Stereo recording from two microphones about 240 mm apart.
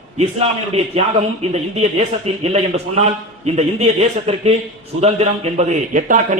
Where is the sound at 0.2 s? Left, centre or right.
Right.